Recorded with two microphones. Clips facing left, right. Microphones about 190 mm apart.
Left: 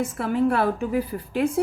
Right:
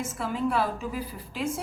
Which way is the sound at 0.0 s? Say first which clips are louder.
Left 7 dB; 60° left (ahead or behind).